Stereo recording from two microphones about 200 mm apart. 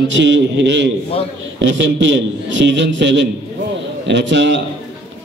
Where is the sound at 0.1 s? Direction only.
65° right (ahead or behind).